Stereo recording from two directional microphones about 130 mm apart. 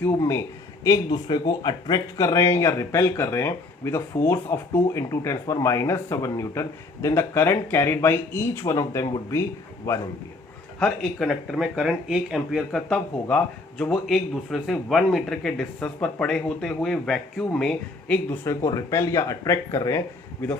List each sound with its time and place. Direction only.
0.2 s speech: 20° left (ahead or behind)
0.9 s speech: 35° left (ahead or behind)
10.8 s a man's voice: 5° left (ahead or behind)
13.2 s a man's voice: 15° left (ahead or behind)
18.4 s speech: 25° left (ahead or behind)
20.4 s a man's voice: 15° left (ahead or behind)